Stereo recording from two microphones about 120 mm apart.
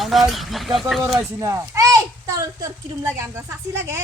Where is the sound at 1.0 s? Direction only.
25° right (ahead or behind).